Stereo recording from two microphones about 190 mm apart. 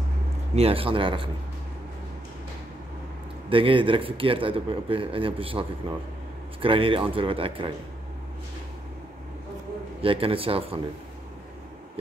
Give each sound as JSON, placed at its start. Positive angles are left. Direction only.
{"t": 0.6, "sound": "speech", "side_deg": -30}
{"t": 3.4, "sound": "speech", "side_deg": -25}
{"t": 10.0, "sound": "speech", "side_deg": -30}